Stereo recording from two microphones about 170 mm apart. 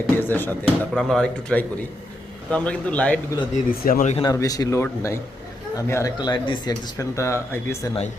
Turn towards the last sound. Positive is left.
turn(degrees=15)  # may be behind; listen again after turning